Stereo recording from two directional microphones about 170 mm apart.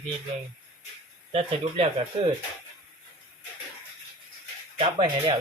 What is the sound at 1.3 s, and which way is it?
Speech, 35° right (ahead or behind).